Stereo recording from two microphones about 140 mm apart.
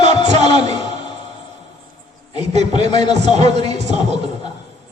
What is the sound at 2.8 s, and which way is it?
Speech, 50° right (ahead or behind).